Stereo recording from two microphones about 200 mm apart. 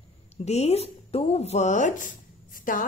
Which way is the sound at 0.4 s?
30° left (ahead or behind).